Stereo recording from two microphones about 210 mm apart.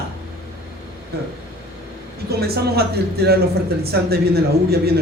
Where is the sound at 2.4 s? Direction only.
50° right (ahead or behind).